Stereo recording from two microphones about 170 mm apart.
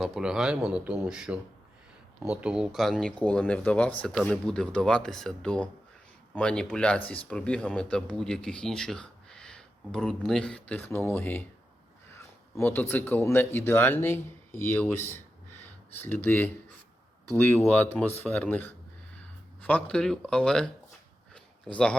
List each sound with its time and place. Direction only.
0.0 s speech: 5° right (ahead or behind)
12.5 s speech: 10° left (ahead or behind)
21.3 s a sound: 5° left (ahead or behind)